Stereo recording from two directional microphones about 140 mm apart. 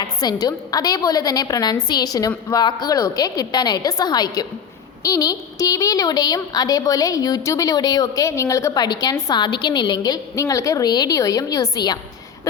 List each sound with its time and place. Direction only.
0.0 s a woman's voice: 30° left (ahead or behind)